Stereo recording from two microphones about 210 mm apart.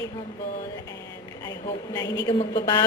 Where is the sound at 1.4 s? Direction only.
20° left (ahead or behind).